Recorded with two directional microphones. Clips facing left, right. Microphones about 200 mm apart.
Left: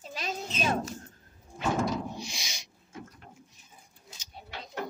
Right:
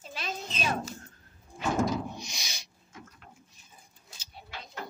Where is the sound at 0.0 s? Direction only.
40° left (ahead or behind).